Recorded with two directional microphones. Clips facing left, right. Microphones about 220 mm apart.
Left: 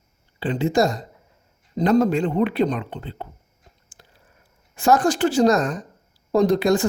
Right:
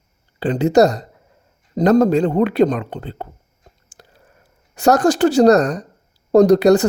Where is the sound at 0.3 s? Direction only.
45° right (ahead or behind).